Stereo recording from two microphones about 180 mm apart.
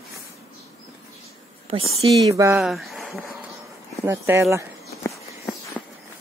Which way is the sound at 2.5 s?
Centre (ahead or behind).